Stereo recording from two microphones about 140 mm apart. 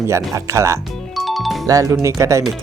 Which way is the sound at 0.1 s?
20° right (ahead or behind).